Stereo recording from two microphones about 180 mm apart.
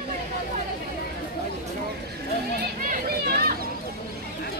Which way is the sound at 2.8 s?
55° right (ahead or behind).